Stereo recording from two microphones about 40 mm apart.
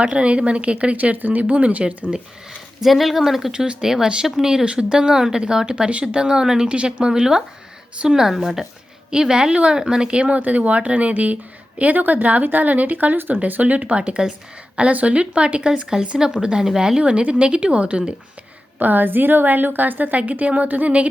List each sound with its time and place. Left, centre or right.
0.0 s speech: right
0.9 s a woman's voice: right
1.5 s speech: right
2.0 s speech: centre
2.8 s speech: centre
3.5 s a woman's voice: centre
4.6 s a woman's voice: right
14.0 s a woman's voice: right
17.0 s speech: right
18.8 s a woman's voice: right